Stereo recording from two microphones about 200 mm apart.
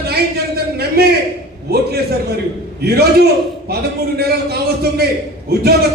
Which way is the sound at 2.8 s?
50° right (ahead or behind).